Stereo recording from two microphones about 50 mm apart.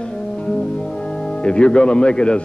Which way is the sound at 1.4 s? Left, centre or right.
Centre.